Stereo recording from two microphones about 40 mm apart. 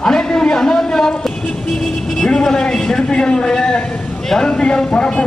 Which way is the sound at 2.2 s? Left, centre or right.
Centre.